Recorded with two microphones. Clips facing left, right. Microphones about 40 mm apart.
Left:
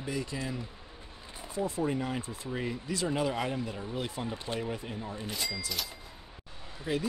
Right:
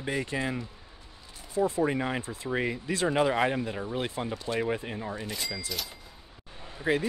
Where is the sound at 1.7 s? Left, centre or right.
Right.